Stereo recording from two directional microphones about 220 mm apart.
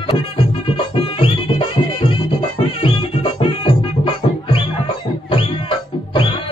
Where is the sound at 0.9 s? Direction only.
25° left (ahead or behind).